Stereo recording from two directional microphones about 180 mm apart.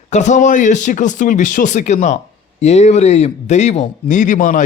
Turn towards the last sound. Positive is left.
turn(degrees=45)  # may be behind; listen again after turning